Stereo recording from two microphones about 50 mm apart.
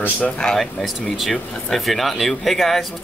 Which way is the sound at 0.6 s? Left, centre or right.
Centre.